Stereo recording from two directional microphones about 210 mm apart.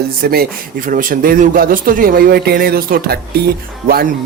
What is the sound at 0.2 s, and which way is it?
Speech, 45° right (ahead or behind).